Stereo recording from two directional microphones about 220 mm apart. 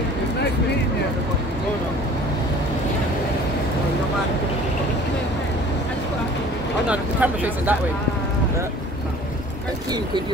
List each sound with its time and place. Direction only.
6.9 s speech: 5° right (ahead or behind)